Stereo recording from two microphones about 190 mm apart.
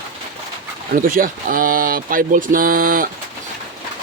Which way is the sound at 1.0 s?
45° right (ahead or behind).